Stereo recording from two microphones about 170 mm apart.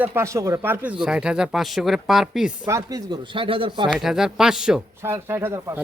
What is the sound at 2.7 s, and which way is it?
Speech, 20° right (ahead or behind).